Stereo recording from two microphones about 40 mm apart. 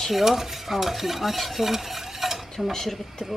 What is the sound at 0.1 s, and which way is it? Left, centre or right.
Stir, centre.